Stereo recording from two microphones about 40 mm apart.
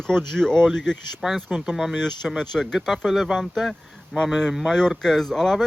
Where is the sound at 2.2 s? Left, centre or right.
Centre.